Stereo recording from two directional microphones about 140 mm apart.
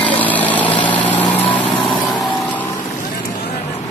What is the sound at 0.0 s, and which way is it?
Vehicle, 10° left (ahead or behind).